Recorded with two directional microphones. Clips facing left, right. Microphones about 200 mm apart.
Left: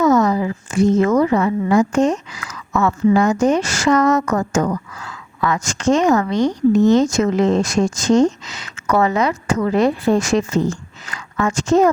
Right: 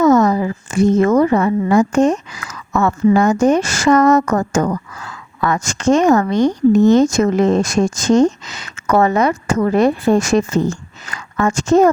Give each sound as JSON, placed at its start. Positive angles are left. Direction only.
{"t": 0.0, "sound": "a woman's voice", "side_deg": -45}